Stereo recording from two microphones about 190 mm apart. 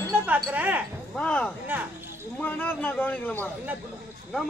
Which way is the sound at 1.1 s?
5° left (ahead or behind).